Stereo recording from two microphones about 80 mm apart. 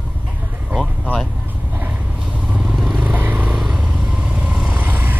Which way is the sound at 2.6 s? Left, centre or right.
Centre.